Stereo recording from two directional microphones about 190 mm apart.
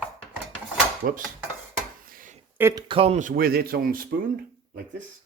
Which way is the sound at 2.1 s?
45° right (ahead or behind).